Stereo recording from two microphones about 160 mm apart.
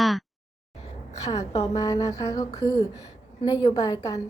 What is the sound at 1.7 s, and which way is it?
A woman's voice, 20° left (ahead or behind).